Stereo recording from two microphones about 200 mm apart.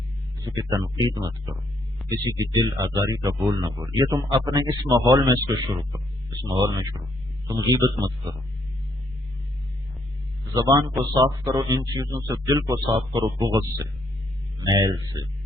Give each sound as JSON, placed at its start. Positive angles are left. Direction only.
{"t": 0.4, "sound": "speech", "side_deg": -20}
{"t": 10.5, "sound": "speech", "side_deg": -20}